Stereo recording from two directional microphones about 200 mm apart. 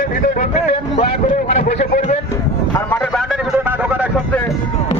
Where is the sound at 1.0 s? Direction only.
35° left (ahead or behind).